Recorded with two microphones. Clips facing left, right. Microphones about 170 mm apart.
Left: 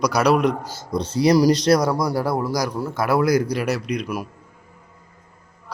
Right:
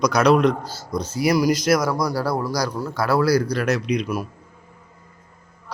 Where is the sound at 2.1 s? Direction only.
20° left (ahead or behind).